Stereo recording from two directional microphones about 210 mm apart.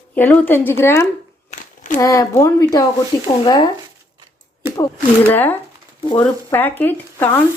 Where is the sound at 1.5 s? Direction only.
35° left (ahead or behind).